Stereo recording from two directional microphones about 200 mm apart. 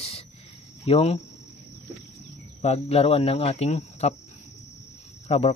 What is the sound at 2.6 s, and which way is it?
Speech, 30° left (ahead or behind).